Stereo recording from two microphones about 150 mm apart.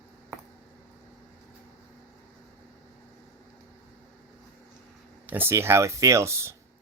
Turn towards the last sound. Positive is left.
turn(degrees=-20)  # may be behind; listen again after turning